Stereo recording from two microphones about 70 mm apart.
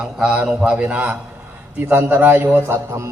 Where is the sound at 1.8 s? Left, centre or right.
Right.